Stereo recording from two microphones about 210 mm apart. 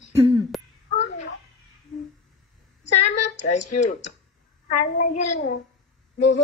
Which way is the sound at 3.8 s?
35° left (ahead or behind).